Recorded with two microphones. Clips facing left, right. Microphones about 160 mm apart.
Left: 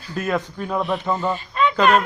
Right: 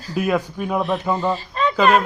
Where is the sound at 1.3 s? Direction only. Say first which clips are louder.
Left 1 dB; 35° right (ahead or behind).